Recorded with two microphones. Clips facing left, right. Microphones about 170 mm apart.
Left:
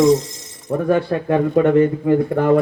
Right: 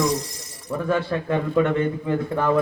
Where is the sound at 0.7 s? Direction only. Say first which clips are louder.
Left 6 dB; 45° left (ahead or behind).